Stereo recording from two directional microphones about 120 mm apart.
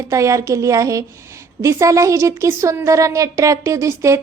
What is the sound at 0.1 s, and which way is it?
Speech, 25° right (ahead or behind).